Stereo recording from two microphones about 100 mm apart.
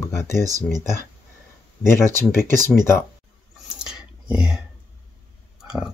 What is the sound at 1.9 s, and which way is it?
Speech, 25° left (ahead or behind).